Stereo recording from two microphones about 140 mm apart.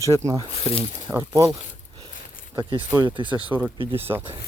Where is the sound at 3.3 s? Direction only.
10° right (ahead or behind).